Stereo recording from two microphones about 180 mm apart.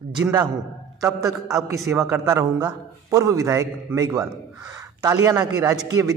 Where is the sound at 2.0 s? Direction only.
15° right (ahead or behind).